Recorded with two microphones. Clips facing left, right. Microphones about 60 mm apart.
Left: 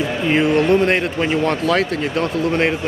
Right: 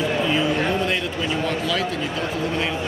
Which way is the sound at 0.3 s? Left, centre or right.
Left.